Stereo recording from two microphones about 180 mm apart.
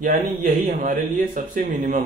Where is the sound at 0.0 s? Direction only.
45° right (ahead or behind).